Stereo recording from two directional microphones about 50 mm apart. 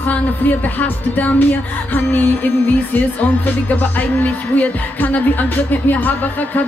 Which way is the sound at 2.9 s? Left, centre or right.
Left.